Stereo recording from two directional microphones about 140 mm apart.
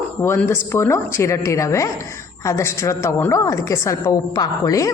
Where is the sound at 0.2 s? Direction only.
20° left (ahead or behind).